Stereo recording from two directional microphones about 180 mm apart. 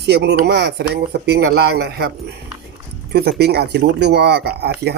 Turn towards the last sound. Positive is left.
turn(degrees=-65)  # may be behind; listen again after turning